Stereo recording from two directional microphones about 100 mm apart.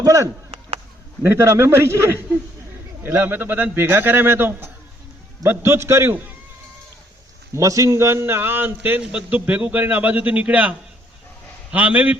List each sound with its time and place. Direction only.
0.0 s a man's voice: 35° right (ahead or behind)
7.5 s a man's voice: 30° right (ahead or behind); by 12.1 s 15° right (ahead or behind)